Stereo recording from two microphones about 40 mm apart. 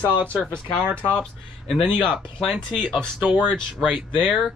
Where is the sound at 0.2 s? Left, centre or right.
Right.